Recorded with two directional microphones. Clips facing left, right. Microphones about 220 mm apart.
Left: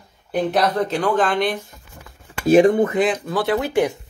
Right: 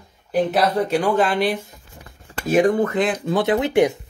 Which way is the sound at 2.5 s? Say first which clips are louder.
Left 4 dB; 25° left (ahead or behind).